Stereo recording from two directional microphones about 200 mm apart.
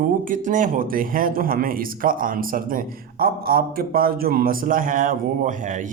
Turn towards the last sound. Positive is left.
turn(degrees=-40)  # may be behind; listen again after turning